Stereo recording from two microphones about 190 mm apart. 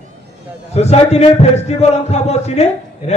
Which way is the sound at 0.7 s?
35° left (ahead or behind).